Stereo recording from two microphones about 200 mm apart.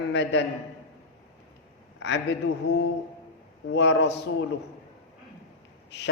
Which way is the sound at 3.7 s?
60° left (ahead or behind).